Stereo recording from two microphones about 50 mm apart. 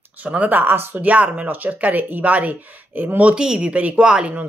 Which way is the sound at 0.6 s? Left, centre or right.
Right.